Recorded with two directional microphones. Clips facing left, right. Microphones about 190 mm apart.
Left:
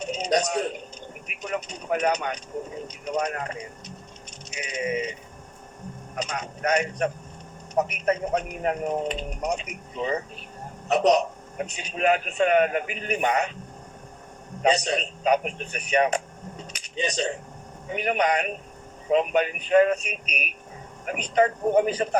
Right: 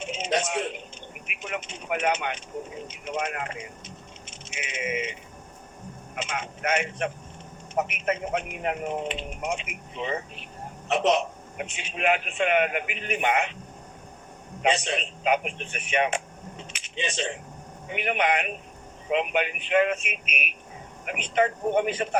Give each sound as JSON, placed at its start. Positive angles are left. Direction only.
{"t": 0.0, "sound": "a sound", "side_deg": 40}
{"t": 1.3, "sound": "vehicle", "side_deg": 40}
{"t": 2.8, "sound": "speech", "side_deg": 40}
{"t": 6.1, "sound": "speech", "side_deg": 40}
{"t": 14.6, "sound": "speech", "side_deg": 40}